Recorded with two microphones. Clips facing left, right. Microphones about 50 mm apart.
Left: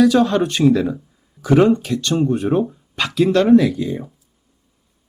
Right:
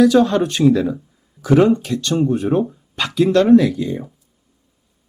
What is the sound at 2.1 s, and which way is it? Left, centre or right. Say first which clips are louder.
Speech: right 1 dB; centre.